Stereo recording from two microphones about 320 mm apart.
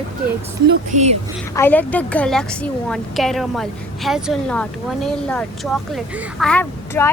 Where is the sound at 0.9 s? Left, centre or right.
Right.